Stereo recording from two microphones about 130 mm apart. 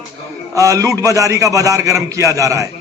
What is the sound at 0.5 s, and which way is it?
A man's voice, 25° right (ahead or behind).